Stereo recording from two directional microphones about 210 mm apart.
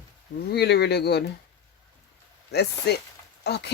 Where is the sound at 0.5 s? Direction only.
50° left (ahead or behind).